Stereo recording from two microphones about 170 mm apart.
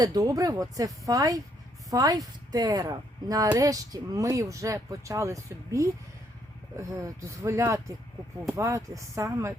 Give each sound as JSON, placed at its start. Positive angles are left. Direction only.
{"t": 0.0, "sound": "speech", "side_deg": -20}
{"t": 7.3, "sound": "speech", "side_deg": -15}